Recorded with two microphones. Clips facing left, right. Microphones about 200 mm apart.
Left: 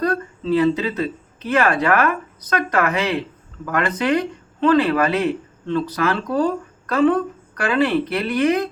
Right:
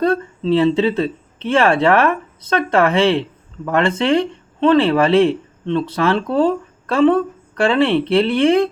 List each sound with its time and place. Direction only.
0.0 s speech: 25° right (ahead or behind)